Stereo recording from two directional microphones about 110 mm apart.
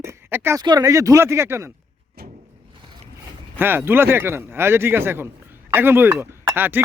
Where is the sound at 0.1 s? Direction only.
20° right (ahead or behind).